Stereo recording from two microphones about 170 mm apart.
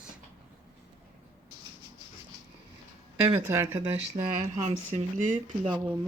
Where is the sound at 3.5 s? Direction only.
15° right (ahead or behind).